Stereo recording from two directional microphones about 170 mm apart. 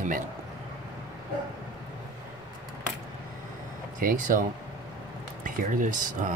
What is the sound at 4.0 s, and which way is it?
Speech, 55° right (ahead or behind).